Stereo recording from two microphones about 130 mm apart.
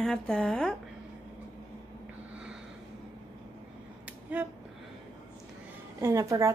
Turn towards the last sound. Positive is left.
turn(degrees=-25)  # may be behind; listen again after turning